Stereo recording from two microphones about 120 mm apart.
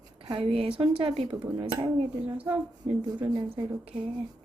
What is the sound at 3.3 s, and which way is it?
Speech, 40° right (ahead or behind).